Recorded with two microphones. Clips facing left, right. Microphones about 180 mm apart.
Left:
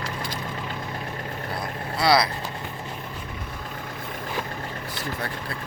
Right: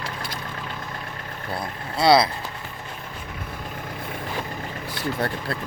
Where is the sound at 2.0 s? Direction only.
25° right (ahead or behind).